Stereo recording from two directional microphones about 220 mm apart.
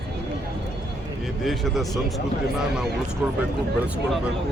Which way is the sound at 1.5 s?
Centre (ahead or behind).